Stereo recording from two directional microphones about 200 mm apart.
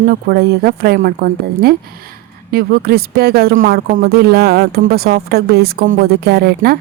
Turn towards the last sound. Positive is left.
turn(degrees=-50)  # may be behind; listen again after turning